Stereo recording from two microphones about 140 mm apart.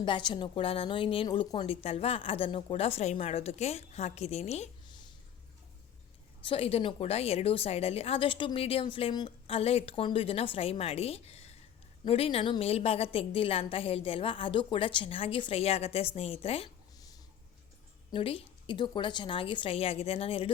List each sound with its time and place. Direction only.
0.0 s a woman's voice: 35° left (ahead or behind); by 4.7 s 50° left (ahead or behind)
4.9 s a sound: 35° left (ahead or behind)
6.4 s a woman's voice: 40° left (ahead or behind)
18.1 s a woman's voice: 40° left (ahead or behind)